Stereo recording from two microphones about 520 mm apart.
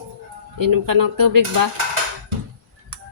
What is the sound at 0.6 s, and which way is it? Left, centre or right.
A woman's voice, right.